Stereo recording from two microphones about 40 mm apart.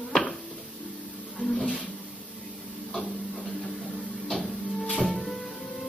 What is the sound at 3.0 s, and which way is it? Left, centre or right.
Music, centre.